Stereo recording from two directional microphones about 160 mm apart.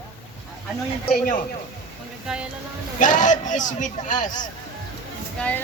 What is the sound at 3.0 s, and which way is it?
A man's voice, 55° left (ahead or behind).